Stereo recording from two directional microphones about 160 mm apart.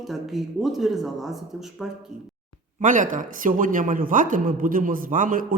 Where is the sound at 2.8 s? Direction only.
55° right (ahead or behind).